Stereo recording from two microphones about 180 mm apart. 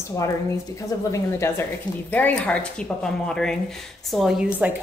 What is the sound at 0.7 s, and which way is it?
A woman's voice, 15° left (ahead or behind).